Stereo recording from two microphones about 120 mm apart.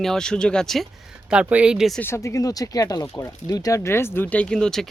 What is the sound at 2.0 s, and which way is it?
Speech, 20° left (ahead or behind).